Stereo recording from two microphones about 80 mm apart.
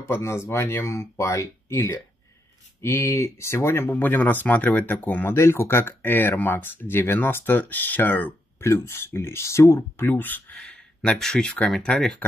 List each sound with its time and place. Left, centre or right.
0.1 s speech: left
10.5 s speech: centre